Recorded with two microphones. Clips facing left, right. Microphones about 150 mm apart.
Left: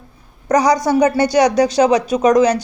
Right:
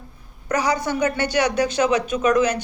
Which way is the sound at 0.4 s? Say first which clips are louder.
Left 8 dB; 40° left (ahead or behind).